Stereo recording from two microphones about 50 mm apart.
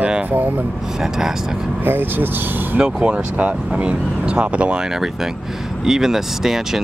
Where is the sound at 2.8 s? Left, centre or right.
Right.